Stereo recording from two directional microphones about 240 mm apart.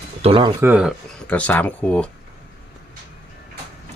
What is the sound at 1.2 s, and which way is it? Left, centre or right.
Speech, centre.